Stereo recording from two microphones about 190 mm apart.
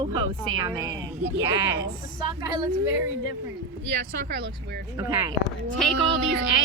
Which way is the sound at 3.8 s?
60° right (ahead or behind).